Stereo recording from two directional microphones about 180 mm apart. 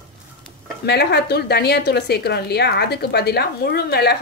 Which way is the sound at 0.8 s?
65° left (ahead or behind).